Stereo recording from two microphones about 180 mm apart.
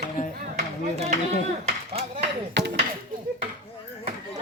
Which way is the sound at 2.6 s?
75° right (ahead or behind).